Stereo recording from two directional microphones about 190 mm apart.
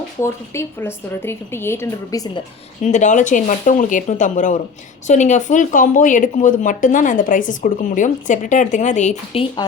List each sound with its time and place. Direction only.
0.2 s a woman's voice: 15° left (ahead or behind)
2.8 s speech: 40° left (ahead or behind)